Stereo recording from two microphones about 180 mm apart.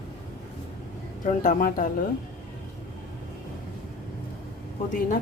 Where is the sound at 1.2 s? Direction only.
45° left (ahead or behind).